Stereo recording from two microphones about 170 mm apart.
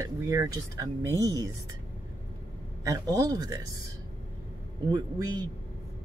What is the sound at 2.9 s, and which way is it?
Speech, 20° right (ahead or behind).